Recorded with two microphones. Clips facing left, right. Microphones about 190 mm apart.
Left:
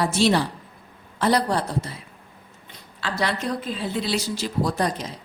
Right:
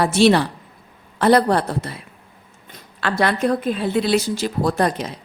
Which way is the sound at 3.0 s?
55° right (ahead or behind).